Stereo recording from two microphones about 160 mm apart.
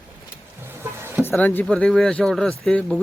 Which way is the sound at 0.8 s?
15° right (ahead or behind).